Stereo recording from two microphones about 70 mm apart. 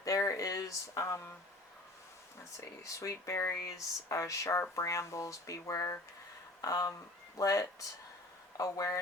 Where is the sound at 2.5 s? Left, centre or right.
Left.